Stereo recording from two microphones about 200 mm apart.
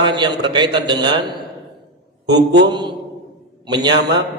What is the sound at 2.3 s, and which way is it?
Speech, 60° right (ahead or behind).